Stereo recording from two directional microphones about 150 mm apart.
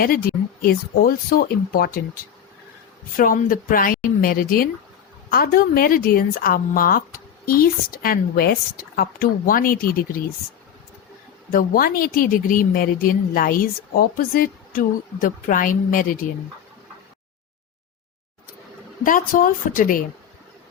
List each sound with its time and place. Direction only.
0.0 s speech: 75° left (ahead or behind)
3.2 s a woman's voice: 70° left (ahead or behind)
11.5 s a woman's voice: 75° left (ahead or behind)
19.0 s a woman's voice: 65° left (ahead or behind)